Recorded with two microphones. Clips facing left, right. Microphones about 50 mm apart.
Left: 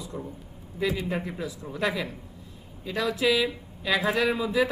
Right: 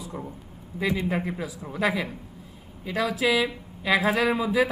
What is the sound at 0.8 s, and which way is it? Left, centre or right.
Speech, centre.